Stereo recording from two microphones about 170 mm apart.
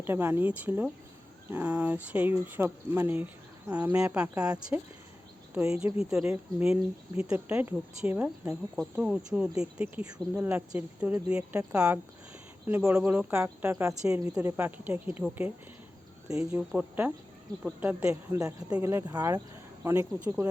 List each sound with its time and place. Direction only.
0.0 s speech: 15° right (ahead or behind)
6.1 s speech: 5° right (ahead or behind)
18.3 s speech: 20° right (ahead or behind)